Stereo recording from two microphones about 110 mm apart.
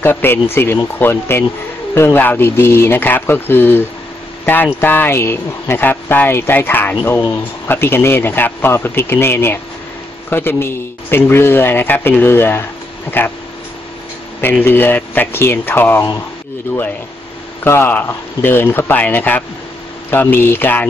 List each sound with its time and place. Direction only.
0.0 s a man's voice: 20° left (ahead or behind)
14.4 s a man's voice: 20° left (ahead or behind)
17.6 s a man's voice: 20° left (ahead or behind)